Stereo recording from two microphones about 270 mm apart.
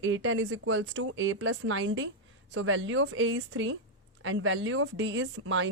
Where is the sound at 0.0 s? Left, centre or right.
Right.